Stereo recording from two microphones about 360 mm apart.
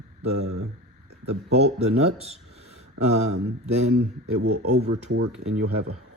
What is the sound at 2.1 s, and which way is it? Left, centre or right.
Speech, centre.